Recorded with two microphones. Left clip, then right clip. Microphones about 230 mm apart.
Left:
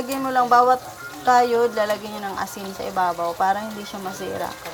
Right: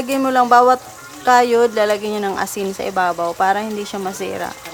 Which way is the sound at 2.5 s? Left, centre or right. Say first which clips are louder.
Right 6 dB; centre.